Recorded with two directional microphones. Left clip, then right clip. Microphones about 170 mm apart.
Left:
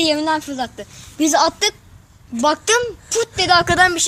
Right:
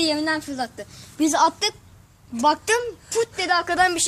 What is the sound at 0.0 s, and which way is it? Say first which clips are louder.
A woman's voice: left 5 dB; 40° left (ahead or behind).